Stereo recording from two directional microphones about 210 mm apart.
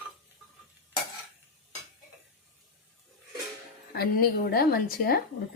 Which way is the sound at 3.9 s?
45° left (ahead or behind).